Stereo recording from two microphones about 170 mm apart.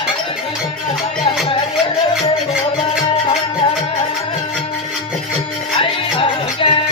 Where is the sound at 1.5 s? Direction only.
35° left (ahead or behind).